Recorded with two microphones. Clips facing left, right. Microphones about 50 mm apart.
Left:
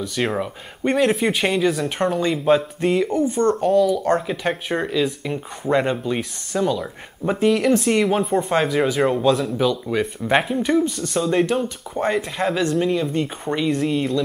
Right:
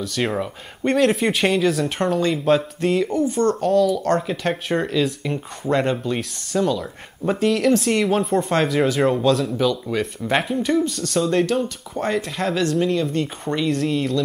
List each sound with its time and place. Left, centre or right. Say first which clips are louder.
0.2 s speech: even; centre
3.3 s speech: left 1 dB; left
3.7 s speech: even; centre